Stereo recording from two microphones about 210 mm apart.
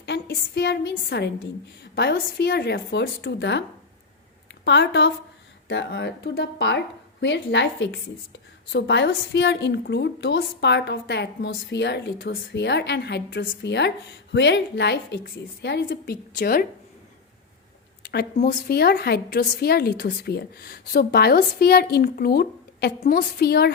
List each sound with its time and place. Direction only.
0.0 s a woman's voice: 55° left (ahead or behind)
4.6 s a woman's voice: 55° left (ahead or behind)
18.0 s a sound: 50° left (ahead or behind)
18.4 s a woman's voice: 50° left (ahead or behind)